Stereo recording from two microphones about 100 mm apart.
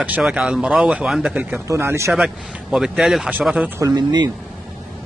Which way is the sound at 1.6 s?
30° right (ahead or behind).